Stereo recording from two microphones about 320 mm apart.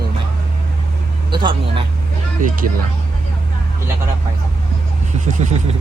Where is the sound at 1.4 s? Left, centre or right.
Centre.